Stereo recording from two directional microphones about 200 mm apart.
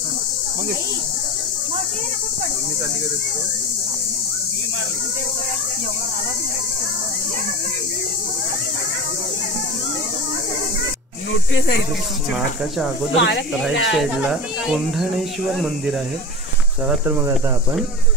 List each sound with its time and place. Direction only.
13.1 s speech: 65° left (ahead or behind)
13.9 s speech: 5° right (ahead or behind)